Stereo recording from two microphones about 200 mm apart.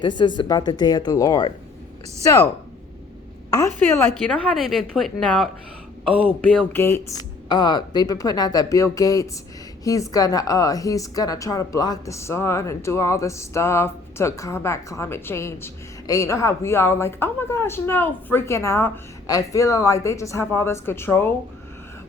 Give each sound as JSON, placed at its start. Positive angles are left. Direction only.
{"t": 0.2, "sound": "speech", "side_deg": 20}
{"t": 3.5, "sound": "a woman's voice", "side_deg": 15}